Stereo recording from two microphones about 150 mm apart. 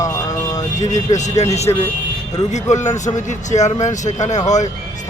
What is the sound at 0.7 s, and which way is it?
Speech, 55° left (ahead or behind).